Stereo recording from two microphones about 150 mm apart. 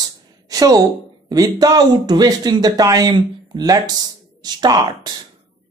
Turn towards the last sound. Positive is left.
turn(degrees=-25)  # may be behind; listen again after turning